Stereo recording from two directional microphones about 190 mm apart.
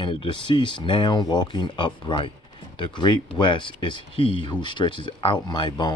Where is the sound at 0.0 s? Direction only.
25° left (ahead or behind).